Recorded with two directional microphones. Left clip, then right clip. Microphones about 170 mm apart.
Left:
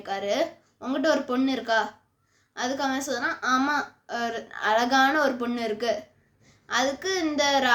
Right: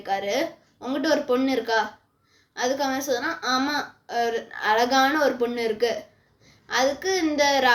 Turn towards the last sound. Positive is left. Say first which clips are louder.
# right 3 dB
turn(degrees=25)  # may be behind; listen again after turning